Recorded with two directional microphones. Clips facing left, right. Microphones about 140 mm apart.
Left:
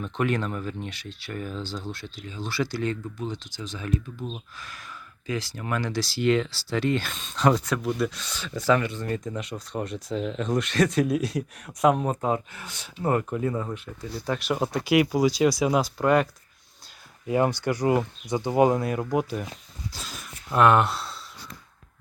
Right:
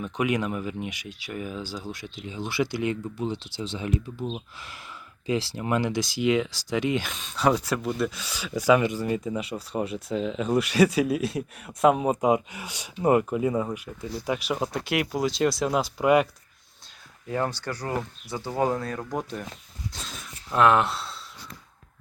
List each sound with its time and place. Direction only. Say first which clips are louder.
0.0 s speech: even; 10° right (ahead or behind)
2.2 s speech: right 2 dB; 20° right (ahead or behind)
6.2 s speech: left 1 dB; 10° right (ahead or behind)
17.2 s speech: left 5 dB; 15° left (ahead or behind)
19.9 s a sound: even; 5° left (ahead or behind)